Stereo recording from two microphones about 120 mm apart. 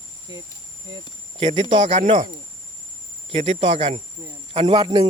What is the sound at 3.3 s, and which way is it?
Speech, 60° right (ahead or behind).